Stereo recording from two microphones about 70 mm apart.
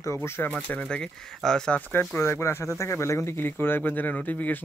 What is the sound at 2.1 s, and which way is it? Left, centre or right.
Speech, left.